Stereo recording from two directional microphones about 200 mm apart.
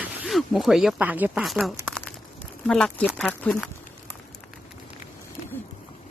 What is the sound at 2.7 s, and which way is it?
Speech, 5° left (ahead or behind).